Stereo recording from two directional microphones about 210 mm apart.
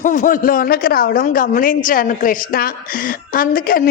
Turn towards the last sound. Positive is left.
turn(degrees=45)  # may be behind; listen again after turning